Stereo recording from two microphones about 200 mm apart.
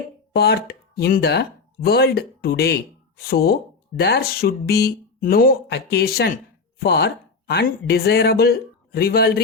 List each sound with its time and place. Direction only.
0.3 s speech: 55° left (ahead or behind)